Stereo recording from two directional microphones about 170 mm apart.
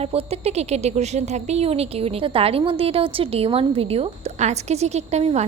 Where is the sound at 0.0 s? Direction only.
35° right (ahead or behind).